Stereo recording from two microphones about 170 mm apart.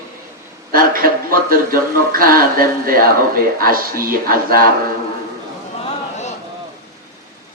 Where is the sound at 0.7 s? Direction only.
60° right (ahead or behind).